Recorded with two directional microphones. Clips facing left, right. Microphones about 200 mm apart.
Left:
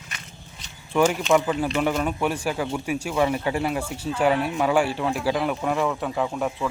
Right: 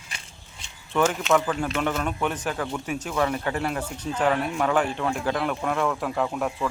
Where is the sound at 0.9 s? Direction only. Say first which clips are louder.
Left 2 dB; 10° left (ahead or behind).